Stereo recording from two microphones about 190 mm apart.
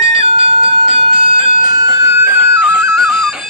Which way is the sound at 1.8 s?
15° right (ahead or behind).